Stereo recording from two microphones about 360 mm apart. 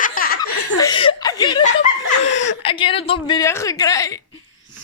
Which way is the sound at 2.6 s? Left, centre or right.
Centre.